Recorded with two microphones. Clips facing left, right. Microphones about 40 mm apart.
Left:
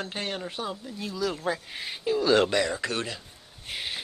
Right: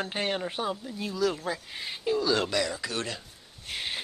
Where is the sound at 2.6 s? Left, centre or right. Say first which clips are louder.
Left 3 dB; left.